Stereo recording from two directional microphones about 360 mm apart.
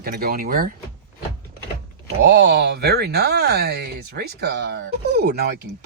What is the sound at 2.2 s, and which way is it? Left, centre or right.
Speech, right.